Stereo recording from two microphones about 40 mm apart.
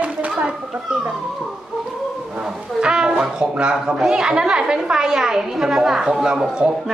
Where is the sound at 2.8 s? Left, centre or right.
Centre.